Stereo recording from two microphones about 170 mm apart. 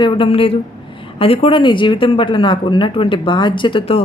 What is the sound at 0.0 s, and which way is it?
A woman's voice, 30° left (ahead or behind).